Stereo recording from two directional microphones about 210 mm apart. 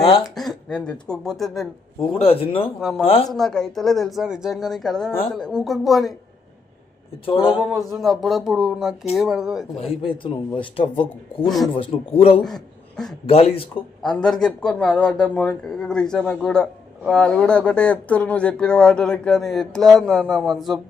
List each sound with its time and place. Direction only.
0.0 s speech: 25° left (ahead or behind)
0.3 s a man's voice: 5° left (ahead or behind)
2.0 s speech: 25° left (ahead or behind)
3.3 s a man's voice: centre (ahead or behind)
7.5 s a man's voice: centre (ahead or behind)
10.1 s speech: 25° left (ahead or behind)
11.4 s a man's voice: centre (ahead or behind)
11.7 s speech: 25° left (ahead or behind)
12.4 s a woman's voice: centre (ahead or behind)
13.3 s speech: 30° left (ahead or behind)
14.0 s a man's voice: 5° left (ahead or behind)